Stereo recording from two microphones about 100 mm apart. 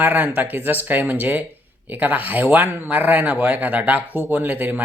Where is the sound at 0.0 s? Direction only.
20° right (ahead or behind).